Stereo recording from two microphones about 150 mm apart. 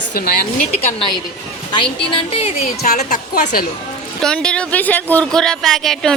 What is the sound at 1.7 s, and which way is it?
A woman's voice, 35° left (ahead or behind).